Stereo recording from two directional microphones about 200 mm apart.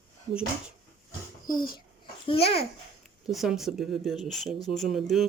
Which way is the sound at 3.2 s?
Centre (ahead or behind).